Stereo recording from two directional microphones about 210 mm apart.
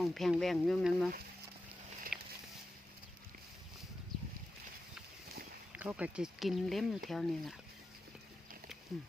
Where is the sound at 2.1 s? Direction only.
5° right (ahead or behind).